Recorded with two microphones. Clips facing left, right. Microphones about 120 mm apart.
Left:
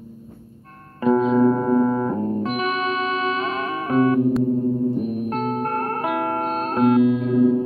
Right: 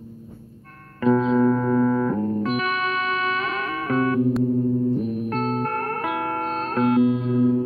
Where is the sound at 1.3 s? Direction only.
25° left (ahead or behind).